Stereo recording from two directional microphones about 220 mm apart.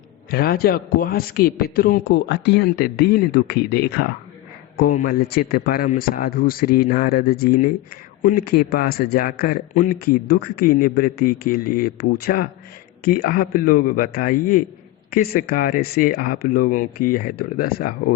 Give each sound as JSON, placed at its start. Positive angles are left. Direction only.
{"t": 0.3, "sound": "speech", "side_deg": 45}